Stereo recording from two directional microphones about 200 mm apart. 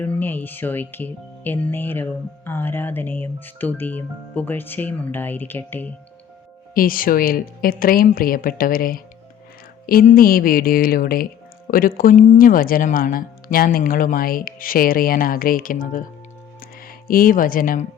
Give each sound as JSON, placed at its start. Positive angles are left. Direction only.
{"t": 0.0, "sound": "speech", "side_deg": 10}
{"t": 6.7, "sound": "speech", "side_deg": 45}
{"t": 16.6, "sound": "music", "side_deg": 45}